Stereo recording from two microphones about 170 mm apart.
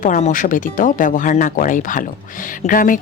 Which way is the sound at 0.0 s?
45° left (ahead or behind).